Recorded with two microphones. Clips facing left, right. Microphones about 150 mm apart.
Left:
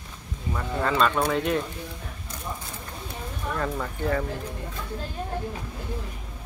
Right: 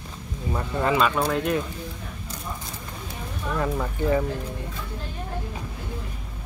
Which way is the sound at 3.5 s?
10° right (ahead or behind).